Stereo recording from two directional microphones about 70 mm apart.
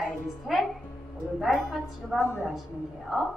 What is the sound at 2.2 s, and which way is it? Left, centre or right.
Speech, left.